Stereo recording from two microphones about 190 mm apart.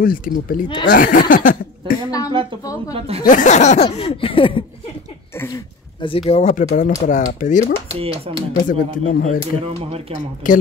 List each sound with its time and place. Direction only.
0.0 s speech: 50° left (ahead or behind)
2.0 s a woman's voice: 20° left (ahead or behind)
3.3 s speech: 40° left (ahead or behind)
7.9 s speech: 30° right (ahead or behind)
8.6 s speech: 45° left (ahead or behind)
10.4 s speech: 45° left (ahead or behind)